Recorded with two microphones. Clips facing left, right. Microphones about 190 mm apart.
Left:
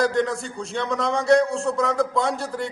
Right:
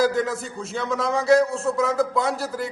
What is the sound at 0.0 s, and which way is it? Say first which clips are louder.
A man's voice: even; 5° right (ahead or behind).